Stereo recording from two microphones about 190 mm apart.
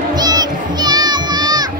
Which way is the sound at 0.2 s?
20° right (ahead or behind).